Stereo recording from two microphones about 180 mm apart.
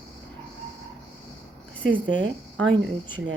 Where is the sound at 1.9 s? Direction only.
90° right.